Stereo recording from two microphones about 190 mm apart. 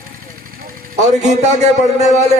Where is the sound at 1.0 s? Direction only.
35° right (ahead or behind).